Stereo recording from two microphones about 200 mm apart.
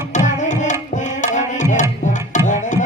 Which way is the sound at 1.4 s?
40° left (ahead or behind).